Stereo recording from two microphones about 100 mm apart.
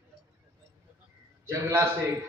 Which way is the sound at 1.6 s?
20° right (ahead or behind).